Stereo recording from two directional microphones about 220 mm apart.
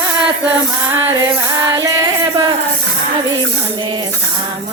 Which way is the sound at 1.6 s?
15° right (ahead or behind).